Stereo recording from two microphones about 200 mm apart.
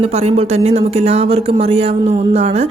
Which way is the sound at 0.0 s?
30° right (ahead or behind).